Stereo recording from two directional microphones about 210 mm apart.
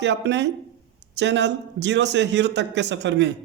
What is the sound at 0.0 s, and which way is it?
Speech, 55° right (ahead or behind).